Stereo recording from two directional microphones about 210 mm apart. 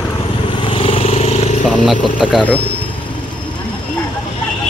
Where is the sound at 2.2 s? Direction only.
Centre (ahead or behind).